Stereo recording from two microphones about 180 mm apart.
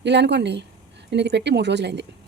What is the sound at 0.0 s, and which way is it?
A woman's voice, 75° right (ahead or behind).